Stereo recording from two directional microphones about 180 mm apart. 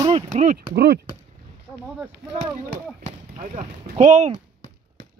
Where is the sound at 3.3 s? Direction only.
40° right (ahead or behind).